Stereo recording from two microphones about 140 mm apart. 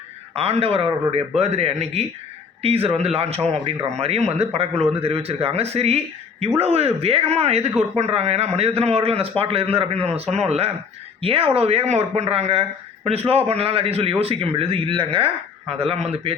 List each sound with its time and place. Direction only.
0.3 s speech: 45° right (ahead or behind)